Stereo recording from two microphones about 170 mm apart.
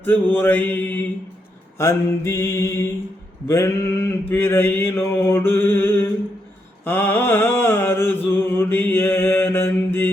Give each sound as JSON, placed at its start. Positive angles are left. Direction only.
{"t": 0.0, "sound": "mantra", "side_deg": 10}